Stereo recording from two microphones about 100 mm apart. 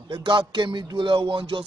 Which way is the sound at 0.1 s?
55° right (ahead or behind).